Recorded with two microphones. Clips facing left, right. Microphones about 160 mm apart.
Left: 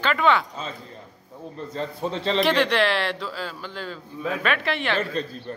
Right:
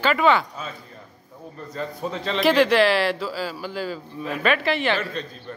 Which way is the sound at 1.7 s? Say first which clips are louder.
Even; 30° left (ahead or behind).